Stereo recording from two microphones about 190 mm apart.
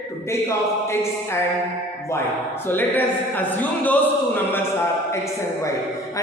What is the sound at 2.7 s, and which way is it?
A man's voice, 10° left (ahead or behind).